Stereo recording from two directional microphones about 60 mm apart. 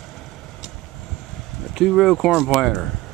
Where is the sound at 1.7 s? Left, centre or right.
Centre.